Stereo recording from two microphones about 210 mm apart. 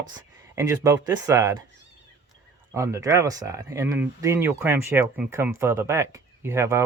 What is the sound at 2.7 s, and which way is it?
Speech, 15° right (ahead or behind).